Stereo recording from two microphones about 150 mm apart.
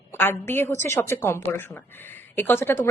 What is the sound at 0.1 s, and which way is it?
A woman's voice, 15° left (ahead or behind).